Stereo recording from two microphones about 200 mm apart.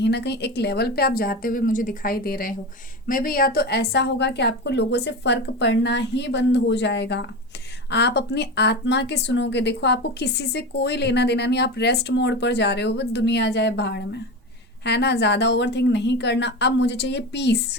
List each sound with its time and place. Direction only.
0.0 s a woman's voice: 60° left (ahead or behind)